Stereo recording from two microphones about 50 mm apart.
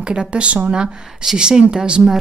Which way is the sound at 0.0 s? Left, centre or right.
Centre.